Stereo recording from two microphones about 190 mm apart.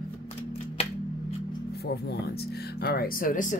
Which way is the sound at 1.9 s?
55° left (ahead or behind).